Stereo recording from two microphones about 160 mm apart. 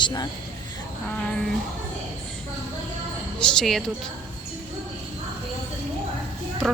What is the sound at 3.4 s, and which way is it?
Speech, 5° left (ahead or behind).